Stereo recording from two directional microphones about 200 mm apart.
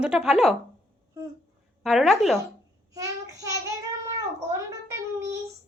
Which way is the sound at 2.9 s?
15° right (ahead or behind).